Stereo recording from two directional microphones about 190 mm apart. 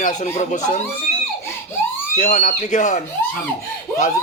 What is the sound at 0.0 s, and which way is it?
Speech, 40° left (ahead or behind).